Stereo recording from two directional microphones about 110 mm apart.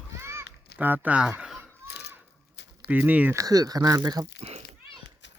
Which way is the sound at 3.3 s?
35° right (ahead or behind).